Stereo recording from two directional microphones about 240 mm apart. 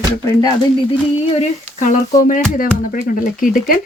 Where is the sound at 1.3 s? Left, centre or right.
Left.